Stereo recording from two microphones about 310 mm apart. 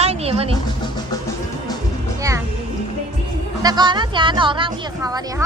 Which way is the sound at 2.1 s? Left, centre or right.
Centre.